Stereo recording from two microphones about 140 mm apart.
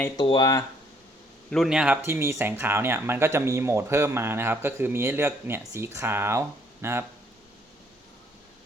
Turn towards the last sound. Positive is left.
turn(degrees=-20)  # may be behind; listen again after turning